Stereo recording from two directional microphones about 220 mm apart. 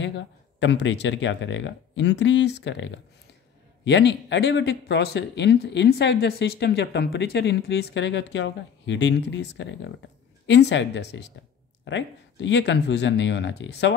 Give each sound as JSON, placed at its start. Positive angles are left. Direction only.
{"t": 0.0, "sound": "speech", "side_deg": 55}